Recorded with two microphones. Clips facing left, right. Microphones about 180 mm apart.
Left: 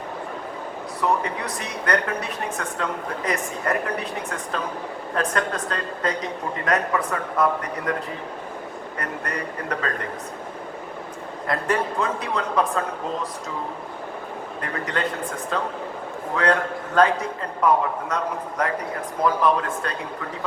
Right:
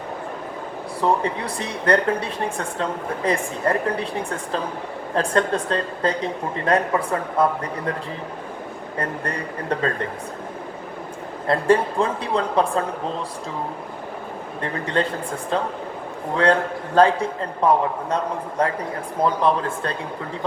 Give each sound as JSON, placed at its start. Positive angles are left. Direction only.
{"t": 1.0, "sound": "a woman's voice", "side_deg": -30}
{"t": 11.4, "sound": "speech", "side_deg": -30}
{"t": 14.6, "sound": "a woman's voice", "side_deg": -30}